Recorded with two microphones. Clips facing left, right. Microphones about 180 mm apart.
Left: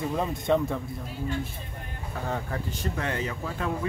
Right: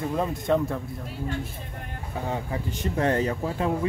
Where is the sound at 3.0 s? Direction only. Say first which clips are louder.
Right 10 dB; 40° right (ahead or behind).